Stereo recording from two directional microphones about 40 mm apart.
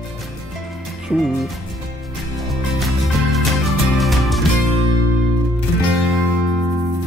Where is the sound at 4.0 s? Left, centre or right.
Centre.